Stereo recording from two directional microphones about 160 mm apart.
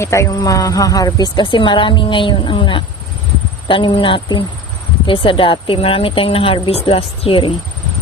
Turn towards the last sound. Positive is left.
turn(degrees=35)  # may be behind; listen again after turning